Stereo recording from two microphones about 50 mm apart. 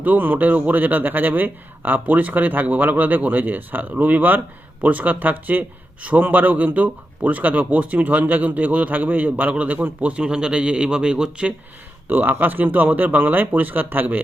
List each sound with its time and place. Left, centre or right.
0.0 s speech: right
10.0 s a man's voice: right
12.0 s speech: right